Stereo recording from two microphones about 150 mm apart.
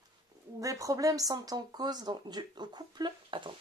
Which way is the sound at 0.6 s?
20° right (ahead or behind).